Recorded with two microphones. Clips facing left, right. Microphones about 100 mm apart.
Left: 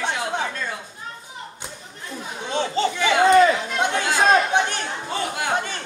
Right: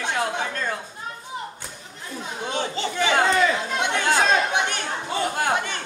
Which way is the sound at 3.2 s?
40° left (ahead or behind).